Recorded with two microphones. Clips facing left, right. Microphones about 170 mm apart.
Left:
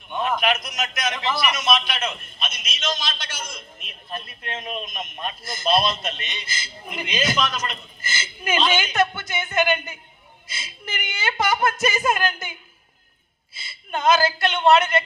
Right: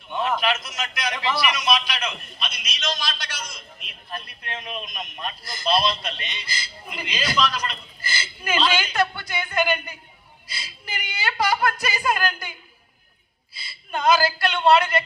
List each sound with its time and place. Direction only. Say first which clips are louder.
0.2 s speech: left 1 dB; 20° left (ahead or behind)
5.8 s a man's voice: even; 50° left (ahead or behind)
6.6 s a woman's voice: left 2 dB; 20° left (ahead or behind)